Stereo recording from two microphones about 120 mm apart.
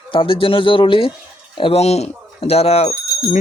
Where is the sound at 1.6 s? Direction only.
55° left (ahead or behind).